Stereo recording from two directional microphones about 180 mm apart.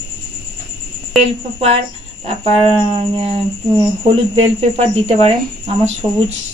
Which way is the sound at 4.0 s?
35° right (ahead or behind).